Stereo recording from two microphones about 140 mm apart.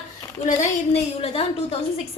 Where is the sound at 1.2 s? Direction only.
40° left (ahead or behind).